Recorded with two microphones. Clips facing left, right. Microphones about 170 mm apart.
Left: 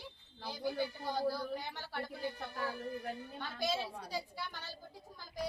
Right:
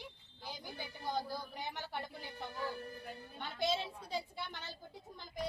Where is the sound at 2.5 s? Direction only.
70° left (ahead or behind).